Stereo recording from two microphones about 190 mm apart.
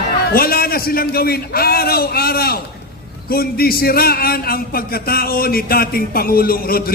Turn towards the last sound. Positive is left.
turn(degrees=50)  # may be behind; listen again after turning